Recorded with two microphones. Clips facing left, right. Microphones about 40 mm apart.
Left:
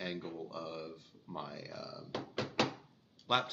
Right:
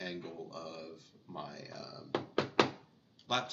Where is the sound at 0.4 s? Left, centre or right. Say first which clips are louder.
Left 2 dB; centre.